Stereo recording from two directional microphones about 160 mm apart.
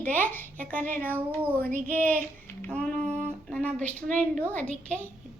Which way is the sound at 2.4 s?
10° left (ahead or behind).